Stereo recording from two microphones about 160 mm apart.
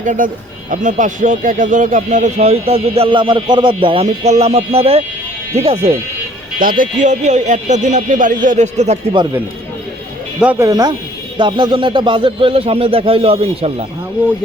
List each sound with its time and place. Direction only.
0.0 s speech: 55° right (ahead or behind); by 6.0 s 35° right (ahead or behind)
6.6 s speech: 60° right (ahead or behind); by 9.0 s 45° right (ahead or behind)
10.4 s speech: 10° right (ahead or behind)
10.7 s speech: 25° right (ahead or behind)